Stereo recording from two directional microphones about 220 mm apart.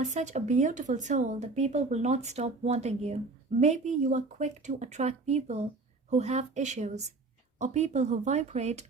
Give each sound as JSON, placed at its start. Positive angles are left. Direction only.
{"t": 0.0, "sound": "speech", "side_deg": -30}